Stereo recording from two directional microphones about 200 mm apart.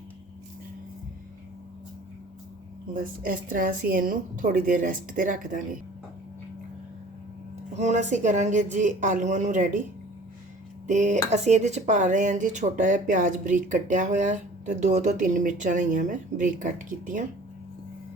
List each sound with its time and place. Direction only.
3.0 s speech: 45° right (ahead or behind)
7.7 s speech: 35° right (ahead or behind)
10.8 s speech: 40° right (ahead or behind)